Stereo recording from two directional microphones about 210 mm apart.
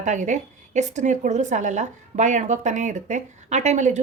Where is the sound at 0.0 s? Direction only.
35° right (ahead or behind).